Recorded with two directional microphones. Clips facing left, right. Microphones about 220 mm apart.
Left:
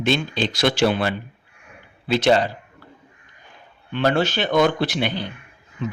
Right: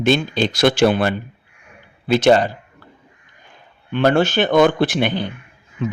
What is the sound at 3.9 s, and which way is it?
Speech, 50° right (ahead or behind).